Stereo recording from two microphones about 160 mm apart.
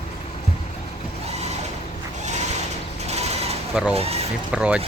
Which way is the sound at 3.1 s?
40° right (ahead or behind).